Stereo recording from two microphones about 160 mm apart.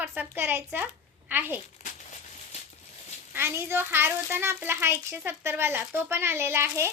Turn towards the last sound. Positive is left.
turn(degrees=-15)  # may be behind; listen again after turning